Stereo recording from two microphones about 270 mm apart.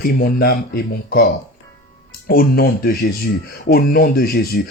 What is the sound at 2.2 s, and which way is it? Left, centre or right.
Speech, left.